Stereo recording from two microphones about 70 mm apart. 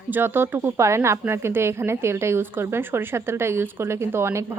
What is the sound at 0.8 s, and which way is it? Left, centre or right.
Speech, right.